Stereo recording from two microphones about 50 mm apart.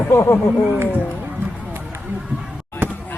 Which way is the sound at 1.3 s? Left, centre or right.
Right.